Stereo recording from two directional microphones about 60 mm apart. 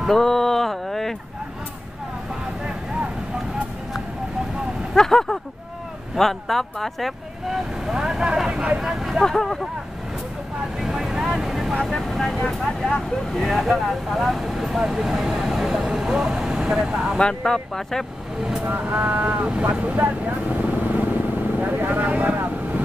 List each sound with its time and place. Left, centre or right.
0.1 s a sound: centre
4.9 s speech: centre
9.2 s speech: centre
10.6 s speech: centre
11.8 s speech: centre
17.2 s speech: centre
18.4 s speech: centre
18.7 s speech: right
21.5 s vehicle: right